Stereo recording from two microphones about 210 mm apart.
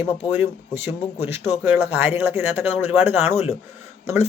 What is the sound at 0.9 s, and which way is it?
Speech, 10° right (ahead or behind).